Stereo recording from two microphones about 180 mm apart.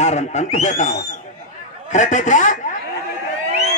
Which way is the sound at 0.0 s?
40° left (ahead or behind).